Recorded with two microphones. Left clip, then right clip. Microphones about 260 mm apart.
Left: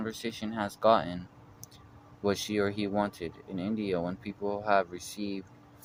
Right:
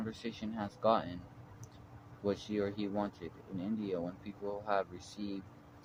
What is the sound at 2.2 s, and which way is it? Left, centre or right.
Speech, left.